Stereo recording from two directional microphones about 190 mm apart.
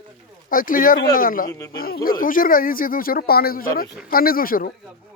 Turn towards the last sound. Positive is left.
turn(degrees=50)  # may be behind; listen again after turning